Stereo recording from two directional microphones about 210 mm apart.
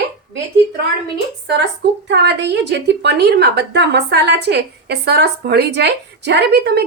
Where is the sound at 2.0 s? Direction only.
55° right (ahead or behind).